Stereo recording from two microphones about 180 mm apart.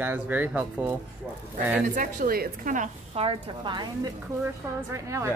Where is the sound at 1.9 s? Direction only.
50° right (ahead or behind).